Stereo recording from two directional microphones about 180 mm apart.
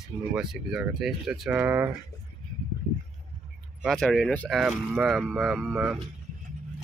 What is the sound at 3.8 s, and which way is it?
Speech, centre (ahead or behind).